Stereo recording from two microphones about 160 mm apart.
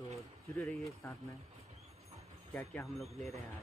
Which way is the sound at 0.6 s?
5° left (ahead or behind).